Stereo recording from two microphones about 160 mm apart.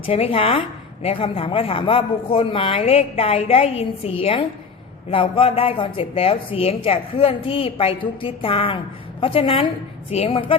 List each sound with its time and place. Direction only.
0.1 s a woman's voice: 35° left (ahead or behind)